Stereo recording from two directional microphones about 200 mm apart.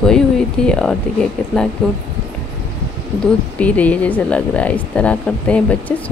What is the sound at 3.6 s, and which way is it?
Speech, 5° left (ahead or behind).